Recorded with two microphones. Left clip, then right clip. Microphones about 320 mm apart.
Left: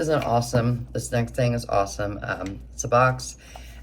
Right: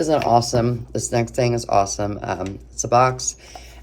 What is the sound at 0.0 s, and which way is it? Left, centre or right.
Speech, centre.